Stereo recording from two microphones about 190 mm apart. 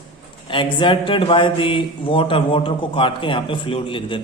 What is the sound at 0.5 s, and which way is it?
A man's voice, 25° left (ahead or behind).